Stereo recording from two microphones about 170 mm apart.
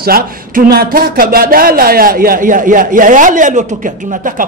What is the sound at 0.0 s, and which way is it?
A man's voice, 60° right (ahead or behind).